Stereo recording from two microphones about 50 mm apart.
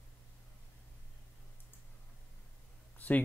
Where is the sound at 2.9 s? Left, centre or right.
Left.